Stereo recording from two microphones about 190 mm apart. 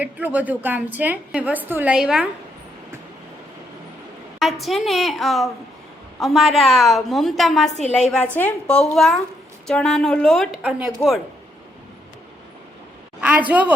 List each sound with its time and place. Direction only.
0.0 s a woman's voice: 10° right (ahead or behind)
4.4 s a woman's voice: centre (ahead or behind)
7.7 s a woman's voice: 35° left (ahead or behind)
8.4 s a woman's voice: 5° left (ahead or behind)
13.5 s a woman's voice: 10° right (ahead or behind)